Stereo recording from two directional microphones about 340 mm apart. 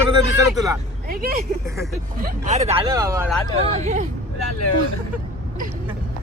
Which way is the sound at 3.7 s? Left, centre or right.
Centre.